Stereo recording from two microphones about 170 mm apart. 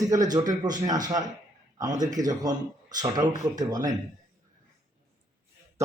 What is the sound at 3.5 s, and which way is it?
Speech, 20° right (ahead or behind).